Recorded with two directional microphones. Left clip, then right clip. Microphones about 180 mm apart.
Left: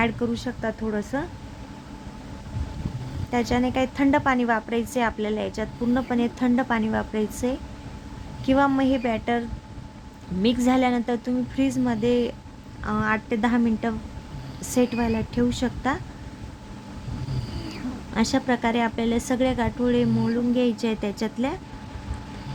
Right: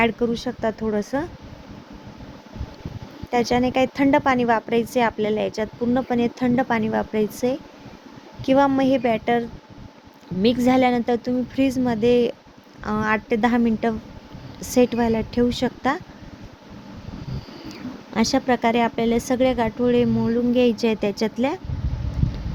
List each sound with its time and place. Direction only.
0.0 s a woman's voice: 25° right (ahead or behind)
3.5 s a woman's voice: 25° right (ahead or behind)
8.4 s a woman's voice: 25° right (ahead or behind)
10.4 s a woman's voice: 25° right (ahead or behind)
18.1 s a woman's voice: 25° right (ahead or behind)